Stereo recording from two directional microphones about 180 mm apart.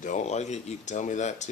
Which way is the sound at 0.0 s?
40° left (ahead or behind).